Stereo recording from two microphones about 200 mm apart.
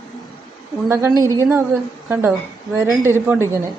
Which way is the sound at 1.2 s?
15° right (ahead or behind).